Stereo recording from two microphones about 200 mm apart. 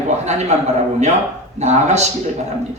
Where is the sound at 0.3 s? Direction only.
35° right (ahead or behind).